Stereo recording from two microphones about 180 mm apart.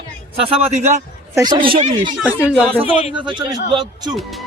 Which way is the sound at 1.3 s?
20° right (ahead or behind).